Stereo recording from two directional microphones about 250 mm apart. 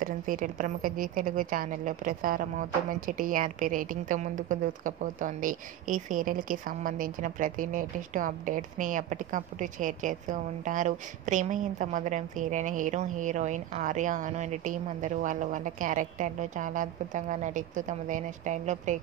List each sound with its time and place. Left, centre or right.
0.0 s a woman's voice: right